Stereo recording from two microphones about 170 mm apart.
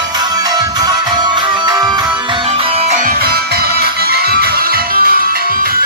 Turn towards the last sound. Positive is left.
turn(degrees=-60)  # may be behind; listen again after turning